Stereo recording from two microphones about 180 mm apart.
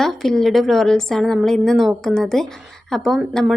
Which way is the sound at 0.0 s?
Centre (ahead or behind).